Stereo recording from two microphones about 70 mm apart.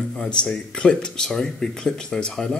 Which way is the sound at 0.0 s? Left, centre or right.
Centre.